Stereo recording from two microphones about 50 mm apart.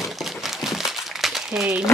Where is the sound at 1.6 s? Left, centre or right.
Centre.